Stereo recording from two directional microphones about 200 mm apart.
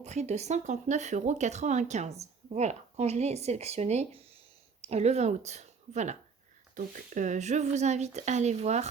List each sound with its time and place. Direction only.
0.0 s a woman's voice: 35° right (ahead or behind)